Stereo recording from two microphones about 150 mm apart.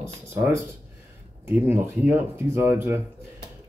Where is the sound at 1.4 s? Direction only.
15° right (ahead or behind).